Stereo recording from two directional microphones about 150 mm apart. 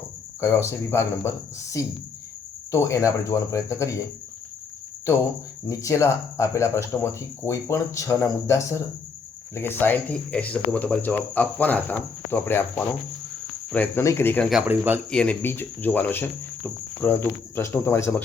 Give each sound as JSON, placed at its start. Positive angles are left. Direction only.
{"t": 0.4, "sound": "speech", "side_deg": 15}
{"t": 5.6, "sound": "speech", "side_deg": 20}
{"t": 14.7, "sound": "speech", "side_deg": -10}
{"t": 15.1, "sound": "speech", "side_deg": 5}